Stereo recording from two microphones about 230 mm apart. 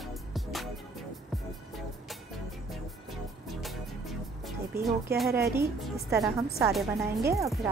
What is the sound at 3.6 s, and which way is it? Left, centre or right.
Music, centre.